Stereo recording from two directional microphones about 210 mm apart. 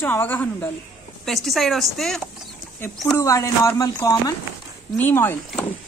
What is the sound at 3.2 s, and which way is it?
Speech, 15° left (ahead or behind).